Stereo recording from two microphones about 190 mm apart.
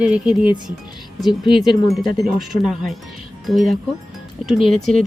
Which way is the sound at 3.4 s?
Centre (ahead or behind).